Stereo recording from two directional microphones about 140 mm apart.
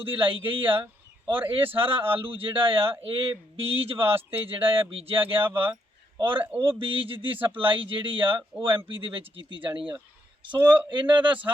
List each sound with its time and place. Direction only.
0.1 s speech: 40° right (ahead or behind)
5.5 s speech: 15° right (ahead or behind)
5.7 s a sound: 35° right (ahead or behind)
6.6 s speech: 40° right (ahead or behind)
10.9 s speech: 35° right (ahead or behind)